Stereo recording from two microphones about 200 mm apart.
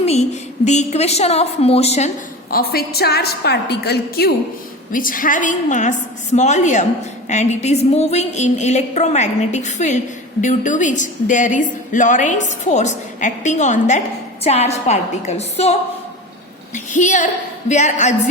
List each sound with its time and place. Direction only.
0.0 s a woman's voice: 30° left (ahead or behind)
2.5 s a woman's voice: 50° left (ahead or behind); by 15.7 s 35° left (ahead or behind)
16.7 s a woman's voice: 40° left (ahead or behind)